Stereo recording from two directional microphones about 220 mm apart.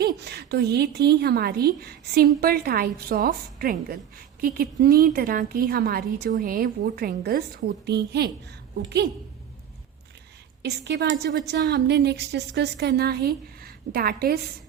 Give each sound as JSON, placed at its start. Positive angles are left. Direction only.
{"t": 0.0, "sound": "a woman's voice", "side_deg": -45}
{"t": 10.6, "sound": "a woman's voice", "side_deg": -50}